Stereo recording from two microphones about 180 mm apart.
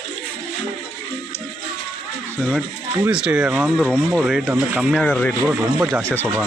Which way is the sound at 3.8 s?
5° left (ahead or behind).